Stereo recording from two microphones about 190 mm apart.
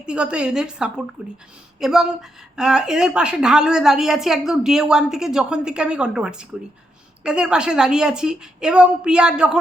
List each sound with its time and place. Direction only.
0.0 s a woman's voice: 5° right (ahead or behind)